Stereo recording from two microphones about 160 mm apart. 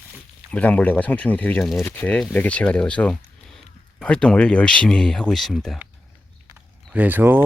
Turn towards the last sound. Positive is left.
turn(degrees=-10)  # may be behind; listen again after turning